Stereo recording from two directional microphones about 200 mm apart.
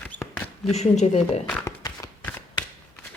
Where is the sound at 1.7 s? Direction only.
15° left (ahead or behind).